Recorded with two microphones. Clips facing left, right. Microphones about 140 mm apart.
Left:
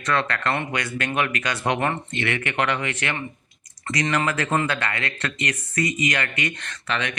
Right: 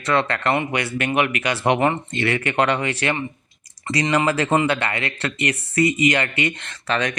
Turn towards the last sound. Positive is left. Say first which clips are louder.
# right 4 dB
turn(degrees=-40)  # may be behind; listen again after turning